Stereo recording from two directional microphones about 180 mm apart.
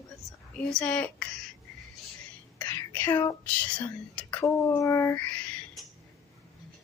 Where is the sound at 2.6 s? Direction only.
10° left (ahead or behind).